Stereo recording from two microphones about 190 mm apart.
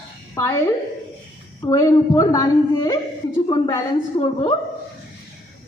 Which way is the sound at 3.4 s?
25° left (ahead or behind).